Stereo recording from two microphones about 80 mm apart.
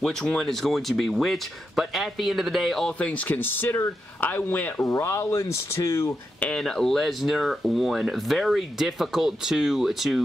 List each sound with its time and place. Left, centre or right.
0.0 s speech: centre
3.0 s speech: centre
4.8 s speech: left
6.4 s speech: centre